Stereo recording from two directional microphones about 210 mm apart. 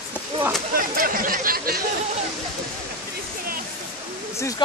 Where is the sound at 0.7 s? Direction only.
40° right (ahead or behind).